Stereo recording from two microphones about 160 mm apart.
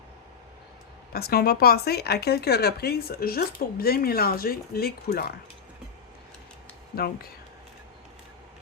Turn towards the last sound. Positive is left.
turn(degrees=70)  # may be behind; listen again after turning